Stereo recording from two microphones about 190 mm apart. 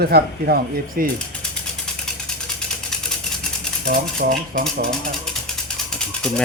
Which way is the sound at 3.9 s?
45° right (ahead or behind).